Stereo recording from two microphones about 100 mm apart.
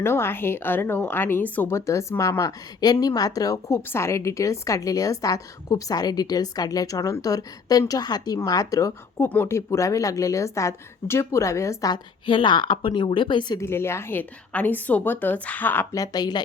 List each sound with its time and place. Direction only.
0.0 s a woman's voice: 25° left (ahead or behind)
1.7 s a woman's voice: 30° left (ahead or behind)
9.2 s a woman's voice: 20° left (ahead or behind)
9.6 s a woman's voice: 30° left (ahead or behind)
12.2 s a woman's voice: 55° left (ahead or behind)
13.6 s a woman's voice: 25° left (ahead or behind)
15.9 s a woman's voice: 40° left (ahead or behind)